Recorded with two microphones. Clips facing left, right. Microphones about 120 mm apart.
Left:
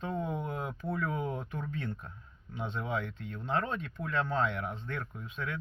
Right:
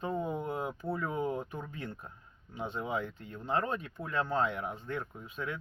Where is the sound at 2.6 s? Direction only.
10° right (ahead or behind).